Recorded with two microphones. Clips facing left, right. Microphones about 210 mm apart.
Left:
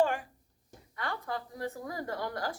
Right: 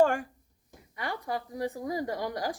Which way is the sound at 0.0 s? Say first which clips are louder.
Right 4 dB; 45° right (ahead or behind).